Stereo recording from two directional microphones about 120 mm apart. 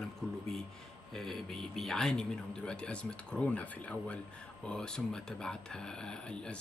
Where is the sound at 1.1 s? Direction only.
Centre (ahead or behind).